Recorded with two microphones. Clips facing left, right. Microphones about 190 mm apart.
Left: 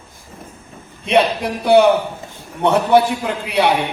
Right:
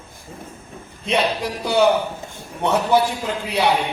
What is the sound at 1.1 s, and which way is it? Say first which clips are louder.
A man's voice: left 5 dB; 60° left (ahead or behind).